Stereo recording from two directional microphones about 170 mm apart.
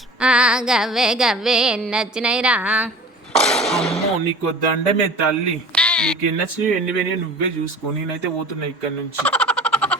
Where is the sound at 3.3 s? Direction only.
5° left (ahead or behind).